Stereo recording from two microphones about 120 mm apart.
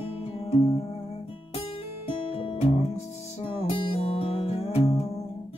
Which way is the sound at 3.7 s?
50° left (ahead or behind).